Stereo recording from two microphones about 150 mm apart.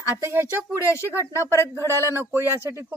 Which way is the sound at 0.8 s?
20° left (ahead or behind).